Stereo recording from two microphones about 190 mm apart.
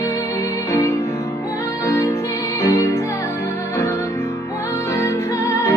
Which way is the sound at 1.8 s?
15° left (ahead or behind).